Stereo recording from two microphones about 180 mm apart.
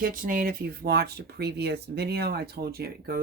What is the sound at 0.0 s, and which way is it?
Speech, 50° right (ahead or behind).